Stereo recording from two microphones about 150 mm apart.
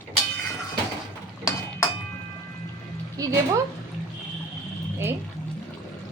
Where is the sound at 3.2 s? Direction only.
20° right (ahead or behind).